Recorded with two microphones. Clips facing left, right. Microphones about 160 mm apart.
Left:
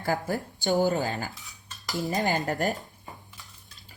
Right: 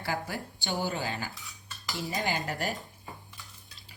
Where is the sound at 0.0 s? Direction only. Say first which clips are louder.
Left 6 dB; 45° left (ahead or behind).